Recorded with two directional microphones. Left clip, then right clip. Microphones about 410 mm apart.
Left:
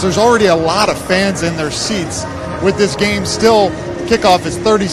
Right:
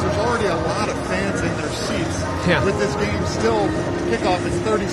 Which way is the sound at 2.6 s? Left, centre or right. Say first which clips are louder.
Left 7 dB; left.